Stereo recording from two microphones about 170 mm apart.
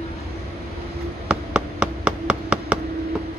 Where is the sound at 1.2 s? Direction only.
5° right (ahead or behind).